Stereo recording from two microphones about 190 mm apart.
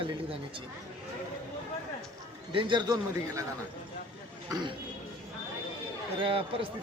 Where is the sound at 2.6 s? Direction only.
25° right (ahead or behind).